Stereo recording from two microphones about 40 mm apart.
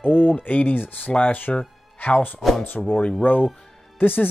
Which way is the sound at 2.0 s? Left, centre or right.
Left.